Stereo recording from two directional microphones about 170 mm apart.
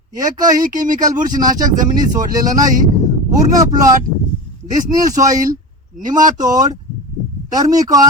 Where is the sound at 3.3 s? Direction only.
20° right (ahead or behind).